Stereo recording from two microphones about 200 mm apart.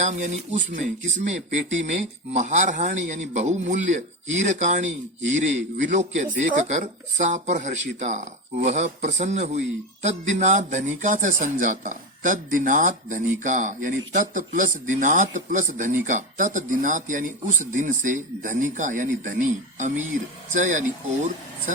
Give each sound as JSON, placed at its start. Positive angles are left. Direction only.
{"t": 0.0, "sound": "speech", "side_deg": -35}